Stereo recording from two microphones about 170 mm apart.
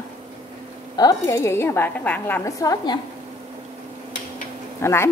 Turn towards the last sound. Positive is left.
turn(degrees=15)  # may be behind; listen again after turning